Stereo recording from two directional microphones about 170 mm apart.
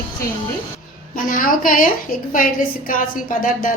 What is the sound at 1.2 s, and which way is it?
A woman's voice, 55° left (ahead or behind).